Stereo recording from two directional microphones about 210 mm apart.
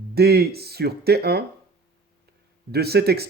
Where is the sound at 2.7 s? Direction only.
50° right (ahead or behind).